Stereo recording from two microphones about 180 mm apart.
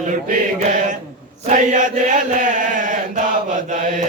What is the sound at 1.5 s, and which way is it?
Chant, 45° right (ahead or behind).